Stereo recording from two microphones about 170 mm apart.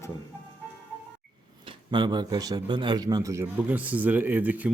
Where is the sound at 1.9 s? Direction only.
25° right (ahead or behind).